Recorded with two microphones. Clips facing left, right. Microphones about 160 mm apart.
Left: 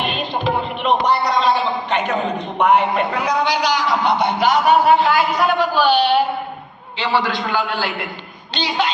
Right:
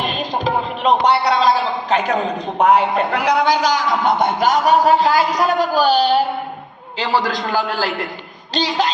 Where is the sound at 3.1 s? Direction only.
70° right (ahead or behind).